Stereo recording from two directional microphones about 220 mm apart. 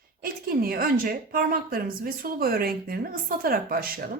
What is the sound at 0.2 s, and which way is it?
A woman's voice, 40° right (ahead or behind).